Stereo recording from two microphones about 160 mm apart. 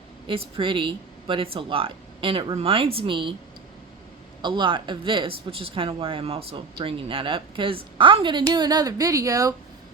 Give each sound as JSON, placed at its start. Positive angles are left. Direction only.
{"t": 0.3, "sound": "speech", "side_deg": -35}
{"t": 4.4, "sound": "speech", "side_deg": -30}